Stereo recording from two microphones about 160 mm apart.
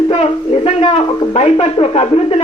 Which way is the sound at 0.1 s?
40° left (ahead or behind).